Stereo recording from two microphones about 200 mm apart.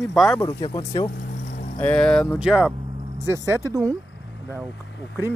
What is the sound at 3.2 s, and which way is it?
Speech, 15° right (ahead or behind).